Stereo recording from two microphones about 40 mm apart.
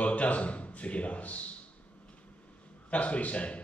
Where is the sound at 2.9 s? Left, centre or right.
Left.